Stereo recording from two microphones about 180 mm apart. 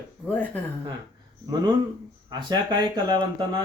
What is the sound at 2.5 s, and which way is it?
Speech, 25° right (ahead or behind).